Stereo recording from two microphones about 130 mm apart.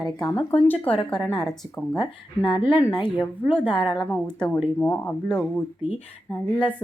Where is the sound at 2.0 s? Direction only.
35° left (ahead or behind).